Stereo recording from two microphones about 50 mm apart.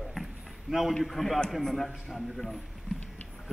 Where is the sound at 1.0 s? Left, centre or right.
Centre.